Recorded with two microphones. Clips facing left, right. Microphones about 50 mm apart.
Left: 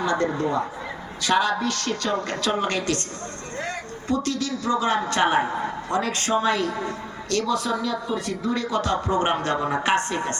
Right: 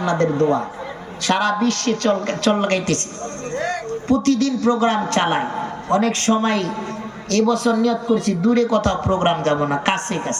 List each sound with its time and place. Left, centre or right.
0.0 s speech: right
3.6 s a man's voice: right